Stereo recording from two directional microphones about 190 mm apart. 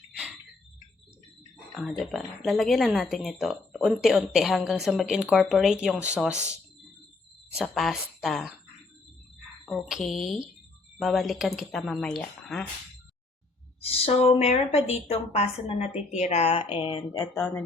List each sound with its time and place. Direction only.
1.7 s speech: centre (ahead or behind)
7.5 s speech: centre (ahead or behind)
9.6 s speech: centre (ahead or behind)
13.8 s a woman's voice: 30° left (ahead or behind)
17.3 s speech: 5° left (ahead or behind)